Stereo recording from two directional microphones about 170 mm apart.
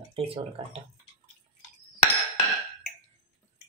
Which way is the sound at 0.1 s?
35° right (ahead or behind).